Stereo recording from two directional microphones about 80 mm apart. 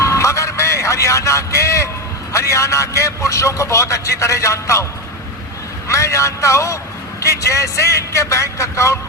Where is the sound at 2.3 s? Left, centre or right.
Left.